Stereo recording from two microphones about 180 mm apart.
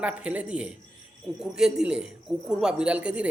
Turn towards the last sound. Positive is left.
turn(degrees=-5)  # may be behind; listen again after turning